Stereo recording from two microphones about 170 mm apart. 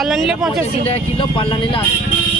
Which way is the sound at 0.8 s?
35° left (ahead or behind).